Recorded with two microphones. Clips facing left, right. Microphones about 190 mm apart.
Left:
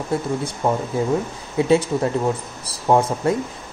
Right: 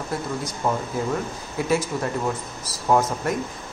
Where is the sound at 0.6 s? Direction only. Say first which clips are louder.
Left 4 dB; 35° left (ahead or behind).